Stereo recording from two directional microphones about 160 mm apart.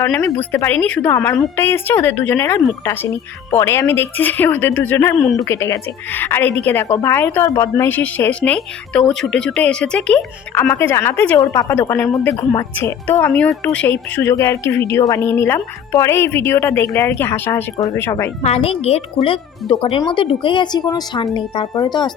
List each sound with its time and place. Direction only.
0.0 s speech: 20° left (ahead or behind)
18.4 s speech: 40° left (ahead or behind)